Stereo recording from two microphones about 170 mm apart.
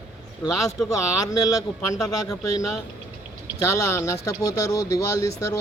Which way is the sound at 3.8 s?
15° left (ahead or behind).